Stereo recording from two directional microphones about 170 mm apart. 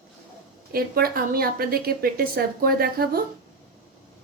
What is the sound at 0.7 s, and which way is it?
A woman's voice, 60° right (ahead or behind).